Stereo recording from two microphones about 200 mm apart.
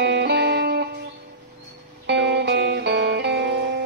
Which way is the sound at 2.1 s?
60° right (ahead or behind).